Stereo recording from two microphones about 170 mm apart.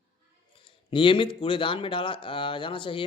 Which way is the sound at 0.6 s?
30° left (ahead or behind).